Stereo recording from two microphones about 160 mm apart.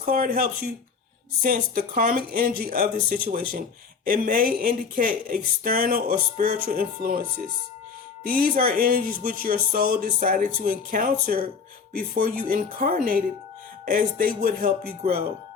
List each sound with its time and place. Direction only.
0.0 s speech: 65° right (ahead or behind)
8.2 s speech: 65° right (ahead or behind)